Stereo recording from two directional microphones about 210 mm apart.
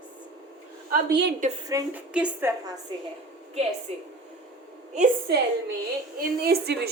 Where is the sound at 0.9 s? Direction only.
50° right (ahead or behind).